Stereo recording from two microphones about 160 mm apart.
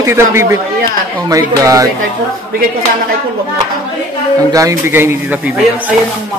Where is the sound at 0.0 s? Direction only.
15° right (ahead or behind).